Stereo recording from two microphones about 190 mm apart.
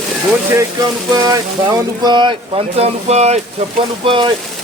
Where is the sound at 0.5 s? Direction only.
20° right (ahead or behind).